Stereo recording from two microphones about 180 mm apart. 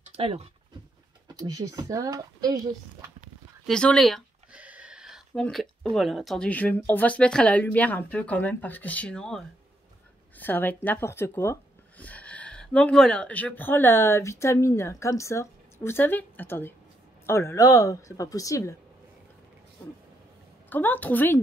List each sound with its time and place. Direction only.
0.1 s speech: 30° right (ahead or behind)
1.4 s speech: 20° right (ahead or behind)
3.6 s speech: 5° left (ahead or behind)
20.7 s a woman's voice: 10° left (ahead or behind)